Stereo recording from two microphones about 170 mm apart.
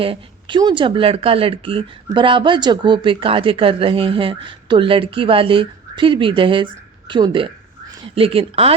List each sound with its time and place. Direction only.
0.0 s speech: 30° right (ahead or behind)